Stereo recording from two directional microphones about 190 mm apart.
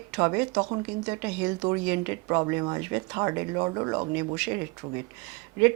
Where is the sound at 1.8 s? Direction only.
10° right (ahead or behind).